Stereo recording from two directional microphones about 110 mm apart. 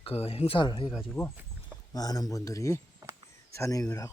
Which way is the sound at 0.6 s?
45° left (ahead or behind).